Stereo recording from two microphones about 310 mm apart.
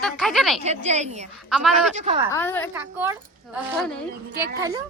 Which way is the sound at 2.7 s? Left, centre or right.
Centre.